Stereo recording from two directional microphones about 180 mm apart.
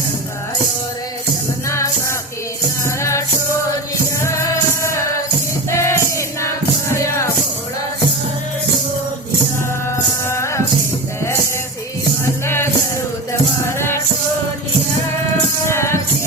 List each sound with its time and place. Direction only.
1.7 s music: 15° left (ahead or behind)
10.2 s music: 15° left (ahead or behind)
12.5 s music: 15° left (ahead or behind)
13.7 s music: 15° left (ahead or behind)
15.6 s music: 15° left (ahead or behind)